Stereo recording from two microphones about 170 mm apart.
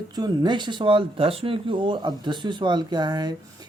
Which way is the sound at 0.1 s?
25° right (ahead or behind).